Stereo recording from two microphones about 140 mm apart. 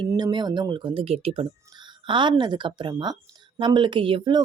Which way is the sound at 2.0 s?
35° right (ahead or behind).